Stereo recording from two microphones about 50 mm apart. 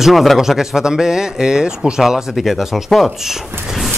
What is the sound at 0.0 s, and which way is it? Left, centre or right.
A man's voice, centre.